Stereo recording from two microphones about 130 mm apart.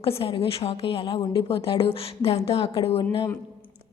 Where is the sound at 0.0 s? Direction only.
45° left (ahead or behind).